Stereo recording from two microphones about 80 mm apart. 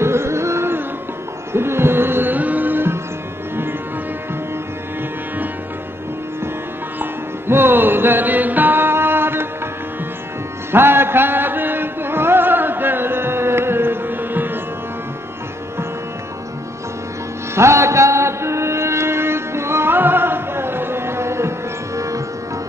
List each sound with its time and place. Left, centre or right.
0.0 s music: right
7.0 s music: right
10.7 s music: right
17.6 s mantra: right